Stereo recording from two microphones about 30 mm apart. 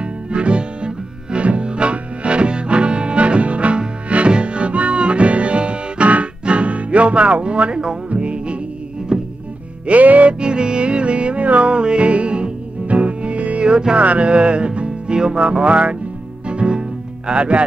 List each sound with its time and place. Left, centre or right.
0.0 s music: right
9.1 s music: right
9.8 s music: right
10.4 s music: right
13.7 s music: right
14.0 s music: right